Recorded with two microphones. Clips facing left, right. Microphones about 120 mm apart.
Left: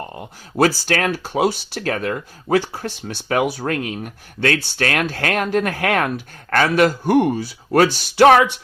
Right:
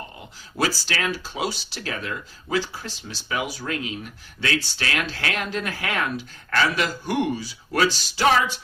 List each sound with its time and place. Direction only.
0.2 s speech: 55° left (ahead or behind)